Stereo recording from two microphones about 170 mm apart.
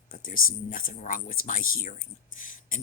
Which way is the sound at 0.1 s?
55° left (ahead or behind).